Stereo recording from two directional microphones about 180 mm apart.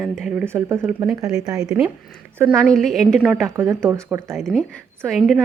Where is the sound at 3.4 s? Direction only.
15° right (ahead or behind).